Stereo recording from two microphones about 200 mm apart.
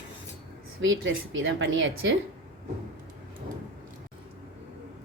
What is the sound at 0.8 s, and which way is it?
Speech, 70° right (ahead or behind).